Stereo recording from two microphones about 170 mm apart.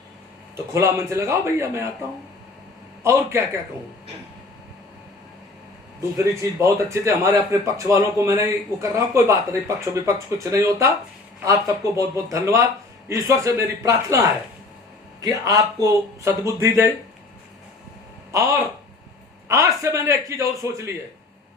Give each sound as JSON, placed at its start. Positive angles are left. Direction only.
{"t": 0.5, "sound": "speech", "side_deg": -15}
{"t": 3.0, "sound": "speech", "side_deg": -15}
{"t": 6.1, "sound": "speech", "side_deg": -20}
{"t": 11.9, "sound": "a man's voice", "side_deg": -20}
{"t": 15.2, "sound": "speech", "side_deg": -20}
{"t": 18.3, "sound": "a man's voice", "side_deg": -20}